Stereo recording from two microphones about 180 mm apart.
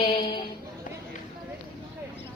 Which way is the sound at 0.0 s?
35° left (ahead or behind).